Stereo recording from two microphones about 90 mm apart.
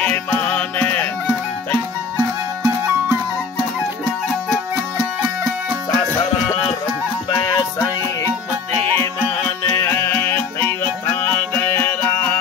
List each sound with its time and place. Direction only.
0.0 s music: 20° left (ahead or behind)
7.2 s music: 45° left (ahead or behind)
9.8 s music: 35° left (ahead or behind)
10.1 s music: 25° left (ahead or behind)